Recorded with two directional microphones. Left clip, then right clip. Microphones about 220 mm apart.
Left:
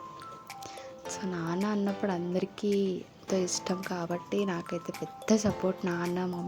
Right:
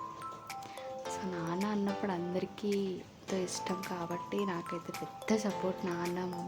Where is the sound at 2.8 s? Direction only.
20° left (ahead or behind).